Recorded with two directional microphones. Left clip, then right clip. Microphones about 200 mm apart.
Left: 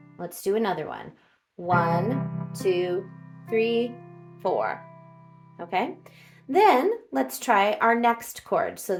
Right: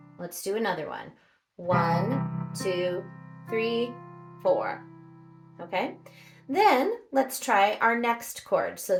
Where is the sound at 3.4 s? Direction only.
50° left (ahead or behind).